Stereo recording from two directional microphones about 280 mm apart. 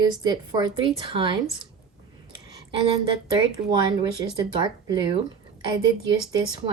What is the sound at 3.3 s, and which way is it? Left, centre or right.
A woman's voice, centre.